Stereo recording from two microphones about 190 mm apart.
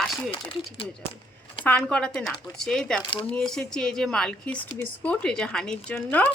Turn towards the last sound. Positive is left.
turn(degrees=10)  # may be behind; listen again after turning